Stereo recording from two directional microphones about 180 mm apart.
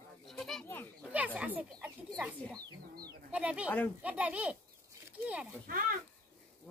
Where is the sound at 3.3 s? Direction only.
5° right (ahead or behind).